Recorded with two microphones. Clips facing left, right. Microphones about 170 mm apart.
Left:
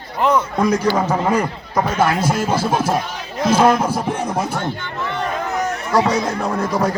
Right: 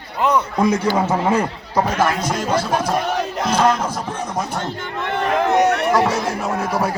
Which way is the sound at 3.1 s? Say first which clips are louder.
Right 6 dB; 65° right (ahead or behind).